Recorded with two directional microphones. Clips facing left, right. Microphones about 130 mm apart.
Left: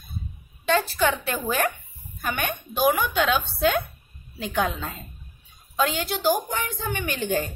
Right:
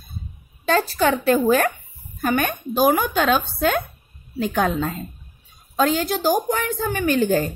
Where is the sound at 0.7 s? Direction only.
40° right (ahead or behind).